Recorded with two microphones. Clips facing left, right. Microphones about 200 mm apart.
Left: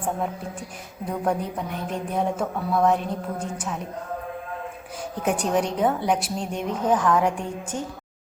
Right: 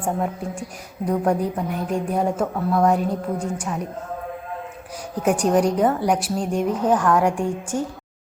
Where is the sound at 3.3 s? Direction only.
5° left (ahead or behind).